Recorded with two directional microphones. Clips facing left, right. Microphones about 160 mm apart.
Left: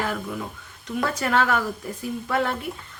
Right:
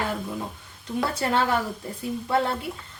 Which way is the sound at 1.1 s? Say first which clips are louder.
Left 1 dB; 30° right (ahead or behind).